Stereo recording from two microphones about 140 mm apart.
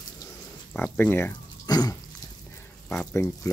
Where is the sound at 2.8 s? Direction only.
15° left (ahead or behind).